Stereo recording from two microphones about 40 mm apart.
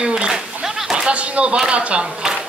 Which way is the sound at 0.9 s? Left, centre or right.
Right.